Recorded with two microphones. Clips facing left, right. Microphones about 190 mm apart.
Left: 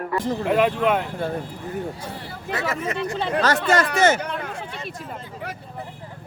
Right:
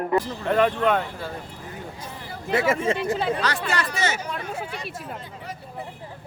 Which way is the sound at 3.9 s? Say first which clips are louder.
Left 8 dB; 50° left (ahead or behind).